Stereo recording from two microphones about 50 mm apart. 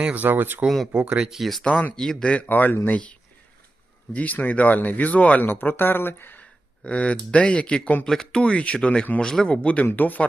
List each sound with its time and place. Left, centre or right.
0.0 s speech: right
1.1 s speech: centre
1.4 s speech: centre
2.5 s speech: left
2.8 s speech: left
5.5 s speech: left
6.4 s speech: left
8.0 s speech: centre
8.4 s speech: left
9.2 s speech: centre
9.5 s speech: left